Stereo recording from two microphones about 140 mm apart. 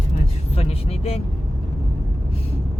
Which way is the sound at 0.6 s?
45° left (ahead or behind).